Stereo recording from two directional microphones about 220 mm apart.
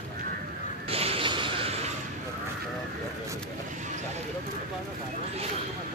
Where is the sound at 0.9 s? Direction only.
25° right (ahead or behind).